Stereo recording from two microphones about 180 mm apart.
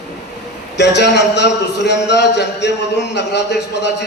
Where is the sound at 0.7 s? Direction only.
70° left (ahead or behind).